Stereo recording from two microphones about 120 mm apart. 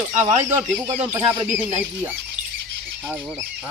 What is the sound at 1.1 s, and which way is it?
Speech, 20° right (ahead or behind).